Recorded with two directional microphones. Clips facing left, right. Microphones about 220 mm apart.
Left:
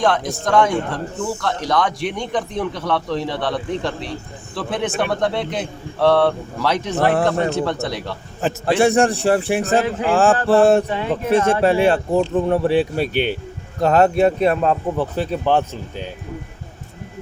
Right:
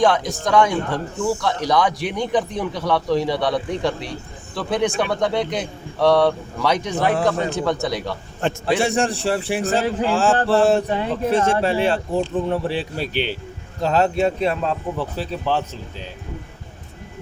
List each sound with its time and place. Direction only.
0.0 s speech: centre (ahead or behind)
7.0 s a man's voice: 50° left (ahead or behind)
7.3 s speech: centre (ahead or behind)
8.6 s a man's voice: 55° left (ahead or behind)